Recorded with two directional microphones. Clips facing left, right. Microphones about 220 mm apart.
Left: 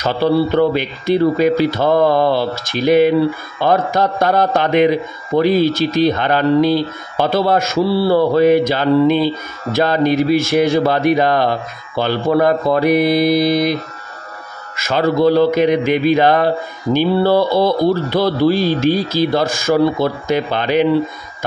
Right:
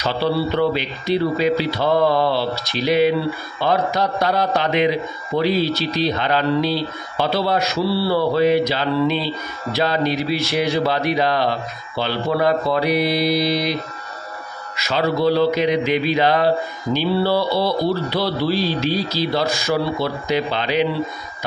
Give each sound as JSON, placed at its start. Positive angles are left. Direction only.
{"t": 0.0, "sound": "speech", "side_deg": 50}
{"t": 14.8, "sound": "speech", "side_deg": 50}